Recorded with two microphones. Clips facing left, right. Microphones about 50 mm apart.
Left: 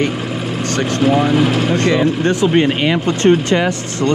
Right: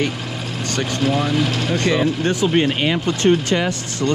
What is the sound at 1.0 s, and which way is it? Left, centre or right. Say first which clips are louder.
Speech: left 6 dB; left.